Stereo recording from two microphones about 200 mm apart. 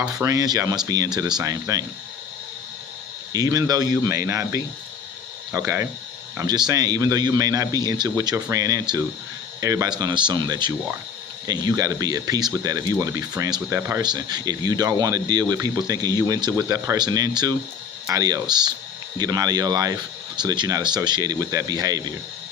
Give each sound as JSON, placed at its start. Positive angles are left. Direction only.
{"t": 0.1, "sound": "speech", "side_deg": -15}
{"t": 3.3, "sound": "speech", "side_deg": -20}